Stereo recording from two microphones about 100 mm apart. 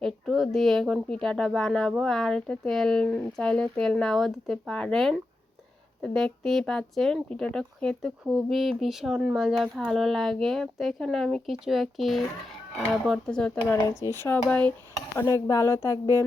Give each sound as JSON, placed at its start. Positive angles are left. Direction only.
{"t": 0.0, "sound": "speech", "side_deg": 0}
{"t": 13.7, "sound": "speech", "side_deg": 25}
{"t": 14.3, "sound": "speech", "side_deg": 10}
{"t": 15.1, "sound": "speech", "side_deg": 30}